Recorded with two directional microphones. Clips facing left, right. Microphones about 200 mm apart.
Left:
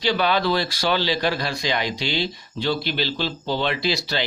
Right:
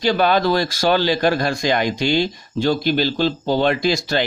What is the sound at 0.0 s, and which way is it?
Speech, 45° right (ahead or behind).